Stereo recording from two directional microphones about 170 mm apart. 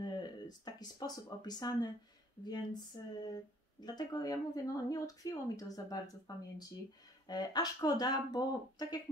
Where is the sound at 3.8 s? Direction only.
25° left (ahead or behind).